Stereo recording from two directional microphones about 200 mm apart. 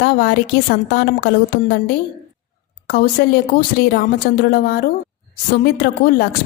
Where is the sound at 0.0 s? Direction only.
55° left (ahead or behind).